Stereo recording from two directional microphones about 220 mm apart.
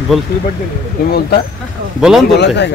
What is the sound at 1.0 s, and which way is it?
Speech, 40° left (ahead or behind).